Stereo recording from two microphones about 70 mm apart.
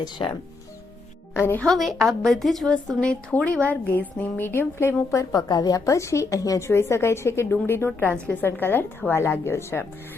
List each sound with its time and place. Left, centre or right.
1.3 s speech: left
1.6 s a woman's voice: centre
3.0 s speech: centre; by 4.9 s left
5.1 s a woman's voice: left
6.6 s a woman's voice: left